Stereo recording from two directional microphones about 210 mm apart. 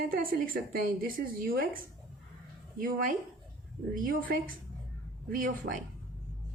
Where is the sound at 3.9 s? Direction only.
40° right (ahead or behind).